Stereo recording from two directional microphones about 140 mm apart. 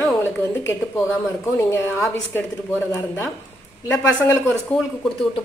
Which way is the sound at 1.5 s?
15° left (ahead or behind).